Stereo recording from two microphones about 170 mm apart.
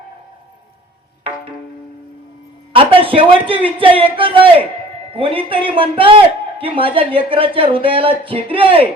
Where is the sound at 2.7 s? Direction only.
30° right (ahead or behind).